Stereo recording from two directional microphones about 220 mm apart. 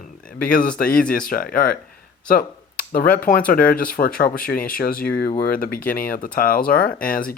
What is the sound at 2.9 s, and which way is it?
Speech, 40° left (ahead or behind).